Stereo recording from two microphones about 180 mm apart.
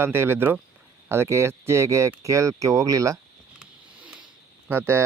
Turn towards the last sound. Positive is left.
turn(degrees=-15)  # may be behind; listen again after turning